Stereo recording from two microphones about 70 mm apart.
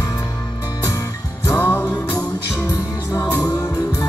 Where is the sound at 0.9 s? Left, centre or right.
Left.